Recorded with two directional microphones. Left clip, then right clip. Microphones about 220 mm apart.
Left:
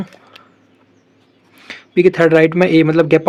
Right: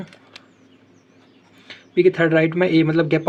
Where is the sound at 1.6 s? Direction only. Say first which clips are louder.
Left 4 dB; 45° left (ahead or behind).